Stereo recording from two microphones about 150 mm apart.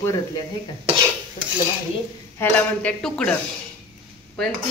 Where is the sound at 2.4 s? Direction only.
10° left (ahead or behind).